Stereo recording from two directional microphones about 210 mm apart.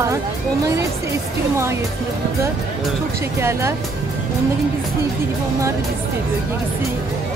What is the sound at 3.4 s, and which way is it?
Speech, 15° right (ahead or behind).